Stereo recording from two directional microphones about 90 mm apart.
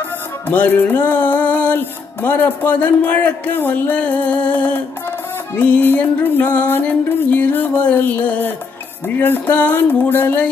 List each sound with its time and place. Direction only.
0.5 s music: 20° left (ahead or behind)